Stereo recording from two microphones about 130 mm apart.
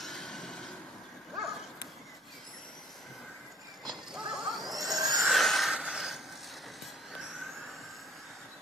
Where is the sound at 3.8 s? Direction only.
5° right (ahead or behind).